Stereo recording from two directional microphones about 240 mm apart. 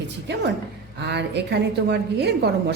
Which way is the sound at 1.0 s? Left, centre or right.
Right.